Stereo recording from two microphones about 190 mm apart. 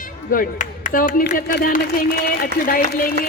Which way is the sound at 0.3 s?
45° left (ahead or behind).